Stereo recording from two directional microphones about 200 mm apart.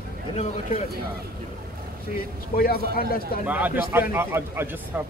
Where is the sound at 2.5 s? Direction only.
50° left (ahead or behind).